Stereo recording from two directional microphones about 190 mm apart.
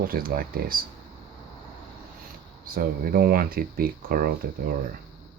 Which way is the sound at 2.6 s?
50° right (ahead or behind).